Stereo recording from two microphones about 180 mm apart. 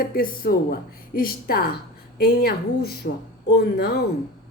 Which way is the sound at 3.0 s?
70° left (ahead or behind).